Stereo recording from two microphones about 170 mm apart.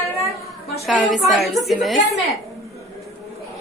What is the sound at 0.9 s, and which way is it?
Cutlery, centre (ahead or behind).